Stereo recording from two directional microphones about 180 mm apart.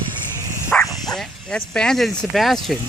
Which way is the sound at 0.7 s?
Centre (ahead or behind).